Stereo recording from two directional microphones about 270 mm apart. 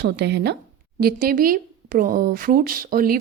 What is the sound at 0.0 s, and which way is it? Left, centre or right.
A woman's voice, right.